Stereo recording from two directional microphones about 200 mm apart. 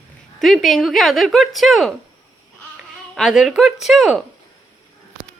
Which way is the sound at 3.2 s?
Centre (ahead or behind).